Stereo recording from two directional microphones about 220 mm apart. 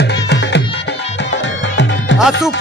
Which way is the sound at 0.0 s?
50° left (ahead or behind).